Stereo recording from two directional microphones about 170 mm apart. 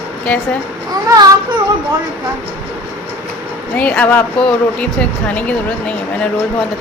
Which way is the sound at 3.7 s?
10° left (ahead or behind).